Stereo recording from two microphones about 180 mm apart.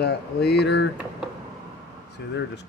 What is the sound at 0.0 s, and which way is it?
Speech, 65° left (ahead or behind).